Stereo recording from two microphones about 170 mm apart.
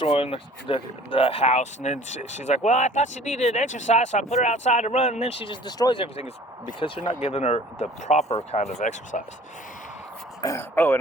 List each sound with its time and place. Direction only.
0.0 s speech: 35° left (ahead or behind)
7.0 s speech: 45° left (ahead or behind)
10.4 s speech: 15° left (ahead or behind)